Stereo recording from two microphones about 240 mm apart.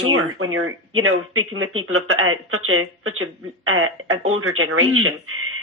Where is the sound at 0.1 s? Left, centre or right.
Right.